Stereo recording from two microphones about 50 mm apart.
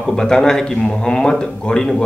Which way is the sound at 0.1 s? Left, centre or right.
Centre.